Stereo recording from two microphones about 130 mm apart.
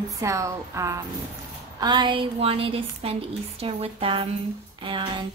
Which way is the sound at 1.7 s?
35° right (ahead or behind).